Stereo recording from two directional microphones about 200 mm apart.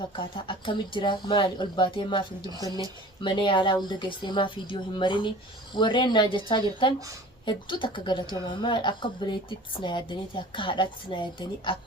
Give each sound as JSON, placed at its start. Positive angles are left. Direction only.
{"t": 0.2, "sound": "speech", "side_deg": 25}